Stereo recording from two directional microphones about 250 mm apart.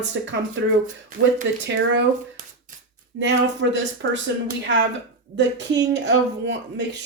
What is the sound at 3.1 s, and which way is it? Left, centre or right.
Speech, right.